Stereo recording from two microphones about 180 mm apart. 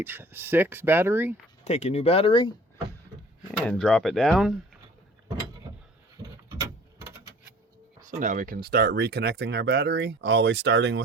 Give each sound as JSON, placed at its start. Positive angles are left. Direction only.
{"t": 0.0, "sound": "speech", "side_deg": -10}
{"t": 1.6, "sound": "speech", "side_deg": 40}
{"t": 3.7, "sound": "speech", "side_deg": 5}
{"t": 6.6, "sound": "a sound", "side_deg": -15}
{"t": 8.0, "sound": "speech", "side_deg": -45}